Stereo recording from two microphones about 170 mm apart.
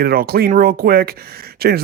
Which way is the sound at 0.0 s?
65° right (ahead or behind).